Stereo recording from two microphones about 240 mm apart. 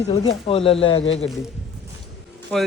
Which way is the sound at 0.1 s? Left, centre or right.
Left.